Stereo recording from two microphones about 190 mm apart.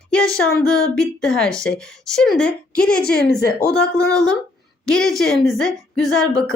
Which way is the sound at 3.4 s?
55° left (ahead or behind).